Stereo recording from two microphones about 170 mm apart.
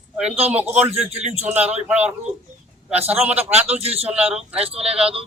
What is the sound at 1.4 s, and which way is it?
Speech, 10° right (ahead or behind).